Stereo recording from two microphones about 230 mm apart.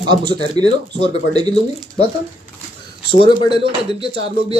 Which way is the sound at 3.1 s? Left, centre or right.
Left.